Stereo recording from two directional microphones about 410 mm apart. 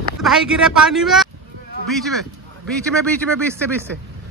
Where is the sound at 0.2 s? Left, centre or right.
Centre.